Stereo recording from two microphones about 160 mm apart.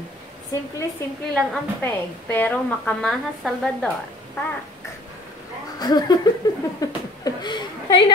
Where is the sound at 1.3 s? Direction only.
Centre (ahead or behind).